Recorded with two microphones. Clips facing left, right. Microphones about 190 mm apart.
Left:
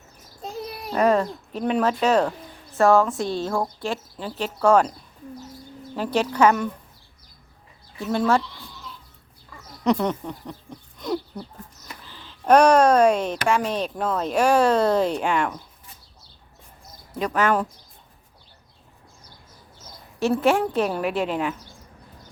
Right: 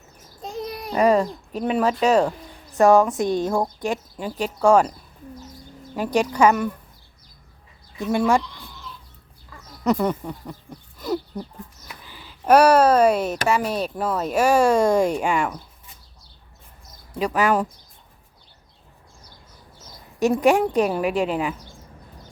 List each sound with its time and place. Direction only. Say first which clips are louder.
0.4 s a child's voice: right 2 dB; centre (ahead or behind)
6.0 s speech: right 1 dB; 10° right (ahead or behind)
7.9 s speech: right 2 dB; 15° right (ahead or behind)
9.8 s speech: right 1 dB; 5° right (ahead or behind)
11.0 s a sound: right 1 dB; 5° right (ahead or behind)
12.0 s speech: right 1 dB; 10° right (ahead or behind)
17.2 s speech: right 1 dB; 10° right (ahead or behind)
20.1 s speech: right 2 dB; 15° right (ahead or behind)